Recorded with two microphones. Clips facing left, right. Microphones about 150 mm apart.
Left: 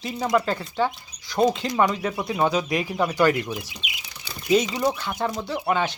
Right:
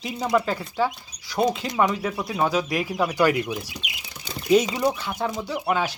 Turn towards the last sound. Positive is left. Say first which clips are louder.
# left 1 dB
turn(degrees=-5)  # may be behind; listen again after turning